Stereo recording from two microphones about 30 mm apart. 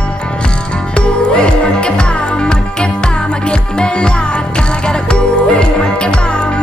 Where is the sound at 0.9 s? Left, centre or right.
Left.